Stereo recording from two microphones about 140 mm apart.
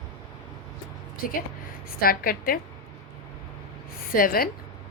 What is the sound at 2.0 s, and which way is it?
Speech, 90° left.